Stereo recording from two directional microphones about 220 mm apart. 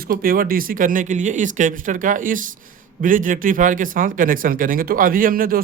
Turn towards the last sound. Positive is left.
turn(degrees=-40)  # may be behind; listen again after turning